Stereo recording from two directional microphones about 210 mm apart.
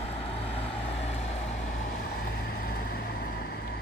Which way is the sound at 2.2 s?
45° left (ahead or behind).